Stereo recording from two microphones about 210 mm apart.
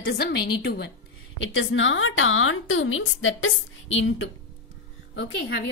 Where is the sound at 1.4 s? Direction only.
65° left (ahead or behind).